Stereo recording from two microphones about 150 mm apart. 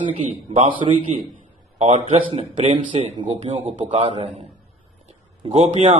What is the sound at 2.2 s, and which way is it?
A man's voice, 40° right (ahead or behind).